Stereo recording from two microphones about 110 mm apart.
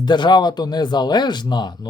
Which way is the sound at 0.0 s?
45° left (ahead or behind).